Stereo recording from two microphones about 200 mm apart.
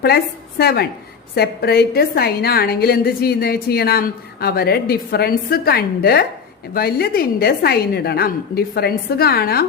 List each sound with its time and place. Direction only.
0.6 s a woman's voice: 50° left (ahead or behind)